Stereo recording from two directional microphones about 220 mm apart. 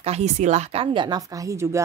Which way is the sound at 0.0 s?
30° right (ahead or behind).